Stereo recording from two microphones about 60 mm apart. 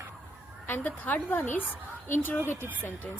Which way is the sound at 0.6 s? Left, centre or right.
Left.